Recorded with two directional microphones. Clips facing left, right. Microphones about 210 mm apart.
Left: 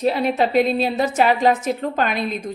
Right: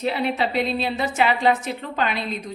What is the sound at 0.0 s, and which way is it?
A woman's voice, 40° left (ahead or behind).